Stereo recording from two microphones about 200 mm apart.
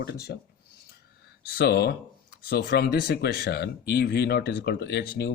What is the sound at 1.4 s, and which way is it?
Speech, 50° left (ahead or behind).